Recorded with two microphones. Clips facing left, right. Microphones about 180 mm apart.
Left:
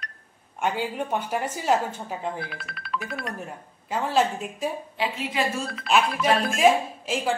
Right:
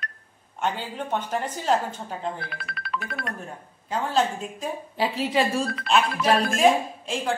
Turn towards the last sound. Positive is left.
turn(degrees=5)  # may be behind; listen again after turning